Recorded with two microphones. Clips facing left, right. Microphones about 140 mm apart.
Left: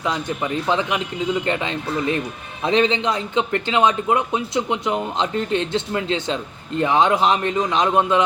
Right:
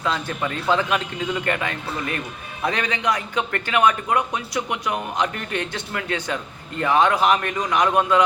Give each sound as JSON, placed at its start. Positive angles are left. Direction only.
{"t": 0.0, "sound": "a man's voice", "side_deg": 20}